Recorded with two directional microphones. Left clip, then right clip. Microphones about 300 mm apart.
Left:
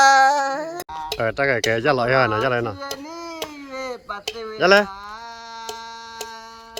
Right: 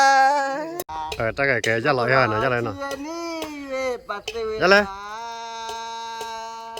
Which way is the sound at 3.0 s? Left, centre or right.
Right.